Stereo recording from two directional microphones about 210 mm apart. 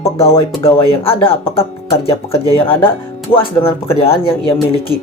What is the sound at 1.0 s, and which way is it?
Speech, 25° left (ahead or behind).